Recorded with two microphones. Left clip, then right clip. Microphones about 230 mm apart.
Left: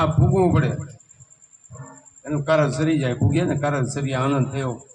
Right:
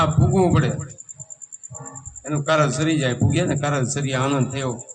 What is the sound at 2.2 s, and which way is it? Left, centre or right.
A man's voice, right.